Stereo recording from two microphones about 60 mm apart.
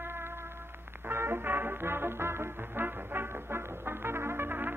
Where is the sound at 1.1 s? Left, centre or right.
Right.